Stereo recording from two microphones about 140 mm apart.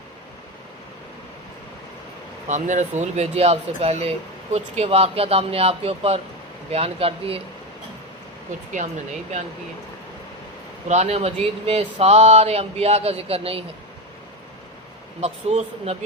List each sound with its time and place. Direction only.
2.5 s speech: 60° right (ahead or behind); by 7.4 s 45° right (ahead or behind)
10.8 s speech: 50° right (ahead or behind)
15.2 s speech: 50° right (ahead or behind)